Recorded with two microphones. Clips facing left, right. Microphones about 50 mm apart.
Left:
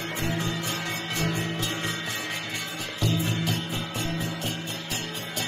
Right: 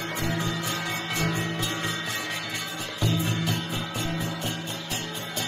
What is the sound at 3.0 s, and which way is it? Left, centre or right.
Music, centre.